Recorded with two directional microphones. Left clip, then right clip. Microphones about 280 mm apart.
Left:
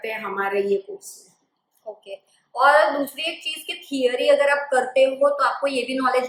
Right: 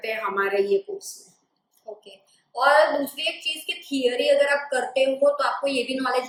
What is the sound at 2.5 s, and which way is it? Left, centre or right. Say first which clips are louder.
A woman's voice: left 2 dB; centre.